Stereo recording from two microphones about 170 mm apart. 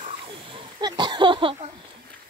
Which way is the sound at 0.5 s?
25° right (ahead or behind).